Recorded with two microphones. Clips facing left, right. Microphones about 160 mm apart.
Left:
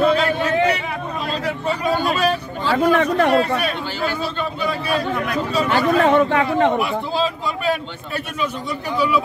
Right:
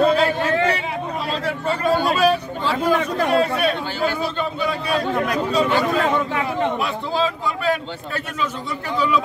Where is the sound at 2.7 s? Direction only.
65° left (ahead or behind).